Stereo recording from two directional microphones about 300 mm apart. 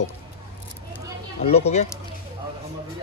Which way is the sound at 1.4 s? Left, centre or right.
Left.